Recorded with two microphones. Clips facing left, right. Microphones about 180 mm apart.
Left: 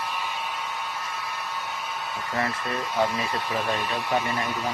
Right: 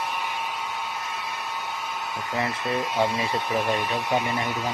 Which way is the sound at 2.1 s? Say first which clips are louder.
Even; 15° right (ahead or behind).